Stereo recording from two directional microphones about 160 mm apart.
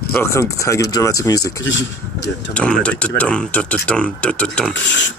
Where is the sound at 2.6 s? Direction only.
5° left (ahead or behind).